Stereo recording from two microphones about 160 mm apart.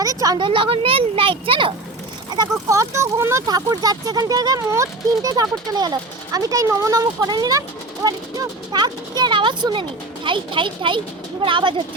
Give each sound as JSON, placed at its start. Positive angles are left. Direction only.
{"t": 0.0, "sound": "a child's voice", "side_deg": -20}
{"t": 2.3, "sound": "a child's voice", "side_deg": -20}